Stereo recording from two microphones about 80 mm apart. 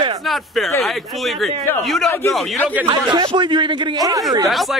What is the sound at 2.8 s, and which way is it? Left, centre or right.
Speech, right.